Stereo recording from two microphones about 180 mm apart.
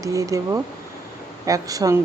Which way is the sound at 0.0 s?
20° right (ahead or behind).